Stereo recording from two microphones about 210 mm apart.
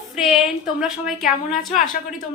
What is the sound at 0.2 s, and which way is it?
A woman's voice, centre (ahead or behind).